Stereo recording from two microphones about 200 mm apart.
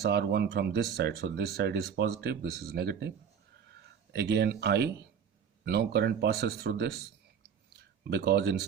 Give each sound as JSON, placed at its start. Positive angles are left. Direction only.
{"t": 0.0, "sound": "speech", "side_deg": -55}
{"t": 4.1, "sound": "speech", "side_deg": -55}
{"t": 8.1, "sound": "speech", "side_deg": -55}